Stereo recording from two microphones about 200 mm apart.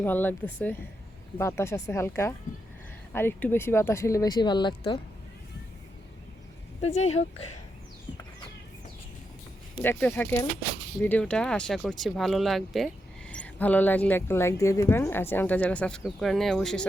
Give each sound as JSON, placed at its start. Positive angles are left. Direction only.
{"t": 0.0, "sound": "speech", "side_deg": 10}
{"t": 6.8, "sound": "speech", "side_deg": 35}
{"t": 9.8, "sound": "speech", "side_deg": 10}